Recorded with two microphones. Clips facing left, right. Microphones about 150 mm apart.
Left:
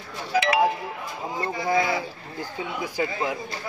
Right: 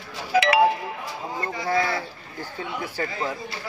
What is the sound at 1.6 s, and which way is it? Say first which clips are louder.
Speech: left 1 dB; 15° left (ahead or behind).